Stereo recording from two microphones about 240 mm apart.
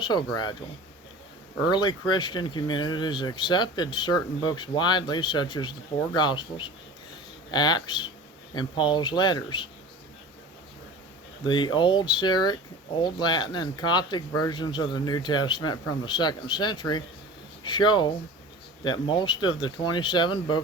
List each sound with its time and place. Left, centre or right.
0.0 s speech: centre
1.6 s speech: centre
11.4 s speech: centre